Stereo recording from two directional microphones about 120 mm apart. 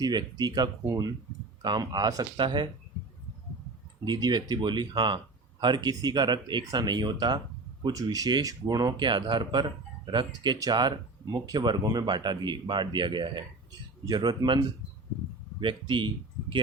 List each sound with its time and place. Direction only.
0.0 s speech: 35° right (ahead or behind)
4.0 s speech: 35° right (ahead or behind)
15.6 s speech: 40° right (ahead or behind)